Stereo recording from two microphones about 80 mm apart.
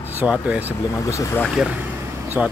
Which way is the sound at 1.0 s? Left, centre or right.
Left.